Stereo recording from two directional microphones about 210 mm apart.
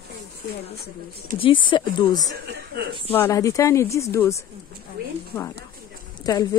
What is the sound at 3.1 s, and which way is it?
Speech, 10° left (ahead or behind).